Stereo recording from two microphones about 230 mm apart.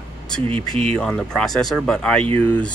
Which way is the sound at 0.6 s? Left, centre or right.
Right.